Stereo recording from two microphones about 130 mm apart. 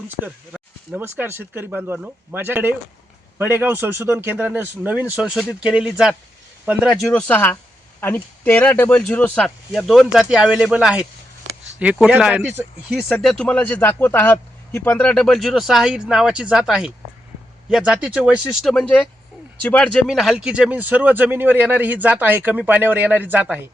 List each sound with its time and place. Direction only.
0.3 s a sound: centre (ahead or behind)
0.9 s a man's voice: 15° right (ahead or behind)
7.1 s a man's voice: 10° left (ahead or behind); by 13.1 s 5° right (ahead or behind)
13.2 s a man's voice: 10° left (ahead or behind); by 18.7 s 5° right (ahead or behind)
18.7 s speech: 5° left (ahead or behind); by 23.6 s 15° right (ahead or behind)